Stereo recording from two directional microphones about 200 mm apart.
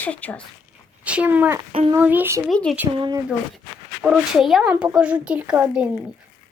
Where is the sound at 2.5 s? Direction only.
Centre (ahead or behind).